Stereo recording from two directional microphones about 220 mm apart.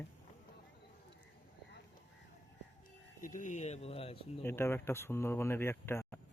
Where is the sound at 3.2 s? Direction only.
35° left (ahead or behind).